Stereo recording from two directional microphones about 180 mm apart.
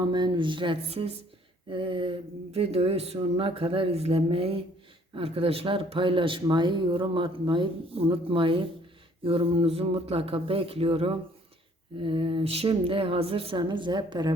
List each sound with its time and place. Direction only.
0.1 s speech: 25° right (ahead or behind)